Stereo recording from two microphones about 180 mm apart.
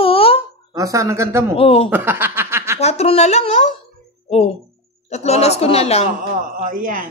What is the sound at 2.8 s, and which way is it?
Speech, 35° left (ahead or behind).